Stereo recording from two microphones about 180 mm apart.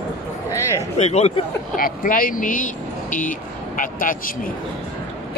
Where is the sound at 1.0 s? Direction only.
35° left (ahead or behind).